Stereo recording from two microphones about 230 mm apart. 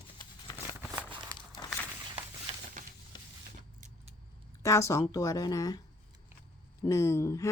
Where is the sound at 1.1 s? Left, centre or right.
Centre.